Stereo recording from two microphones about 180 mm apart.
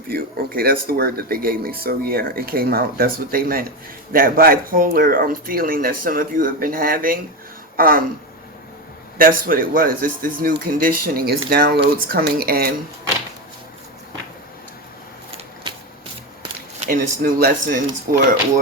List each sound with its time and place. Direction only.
0.1 s speech: 55° right (ahead or behind)
9.1 s speech: 50° right (ahead or behind)
16.8 s speech: 50° right (ahead or behind)